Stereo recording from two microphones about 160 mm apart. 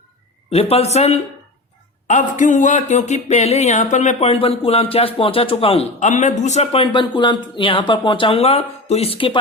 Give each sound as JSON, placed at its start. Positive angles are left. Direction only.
{"t": 0.5, "sound": "speech", "side_deg": 40}